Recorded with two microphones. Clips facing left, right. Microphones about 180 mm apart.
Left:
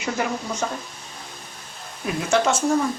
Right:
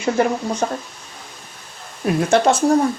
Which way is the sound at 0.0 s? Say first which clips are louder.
Right 7 dB; 30° right (ahead or behind).